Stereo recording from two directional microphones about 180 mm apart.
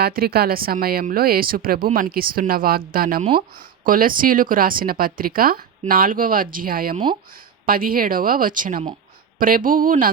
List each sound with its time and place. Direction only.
0.0 s speech: 60° right (ahead or behind)
3.2 s speech: 30° right (ahead or behind)
3.5 s speech: 50° right (ahead or behind)
6.9 s speech: 25° right (ahead or behind)
7.3 s speech: 50° right (ahead or behind)